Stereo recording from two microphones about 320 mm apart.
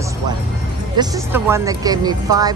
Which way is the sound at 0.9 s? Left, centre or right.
Centre.